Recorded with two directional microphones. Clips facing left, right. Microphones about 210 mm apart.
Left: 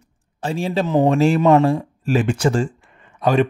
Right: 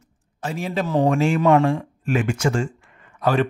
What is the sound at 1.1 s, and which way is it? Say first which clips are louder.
Speech: left 3 dB; 35° left (ahead or behind).